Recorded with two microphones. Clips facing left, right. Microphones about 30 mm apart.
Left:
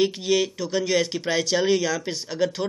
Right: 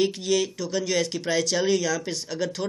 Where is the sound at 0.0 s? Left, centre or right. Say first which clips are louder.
Left 2 dB; centre.